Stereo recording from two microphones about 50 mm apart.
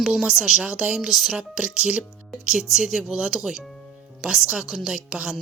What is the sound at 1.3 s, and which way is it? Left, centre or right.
Speech, centre.